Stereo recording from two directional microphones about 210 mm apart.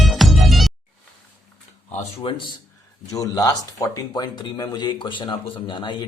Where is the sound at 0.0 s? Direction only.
Centre (ahead or behind).